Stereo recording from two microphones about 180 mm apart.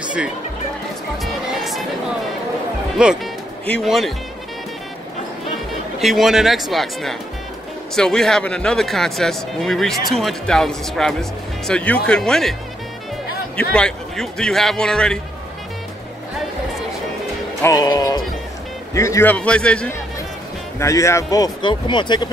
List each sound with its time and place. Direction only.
0.0 s music: 5° right (ahead or behind)
3.0 s speech: 5° right (ahead or behind)
5.9 s speech: centre (ahead or behind)
13.6 s speech: 5° left (ahead or behind)
17.6 s a man's voice: 20° left (ahead or behind)
20.8 s speech: 15° left (ahead or behind)